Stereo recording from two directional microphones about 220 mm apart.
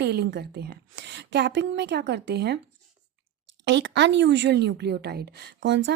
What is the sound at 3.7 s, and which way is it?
A woman's voice, 55° right (ahead or behind).